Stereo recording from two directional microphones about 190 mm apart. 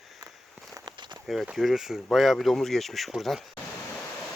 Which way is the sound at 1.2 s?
Centre (ahead or behind).